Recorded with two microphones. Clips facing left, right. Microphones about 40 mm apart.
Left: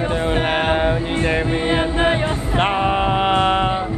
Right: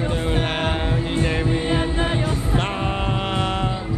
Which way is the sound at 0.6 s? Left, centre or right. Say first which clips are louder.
Left 6 dB; centre.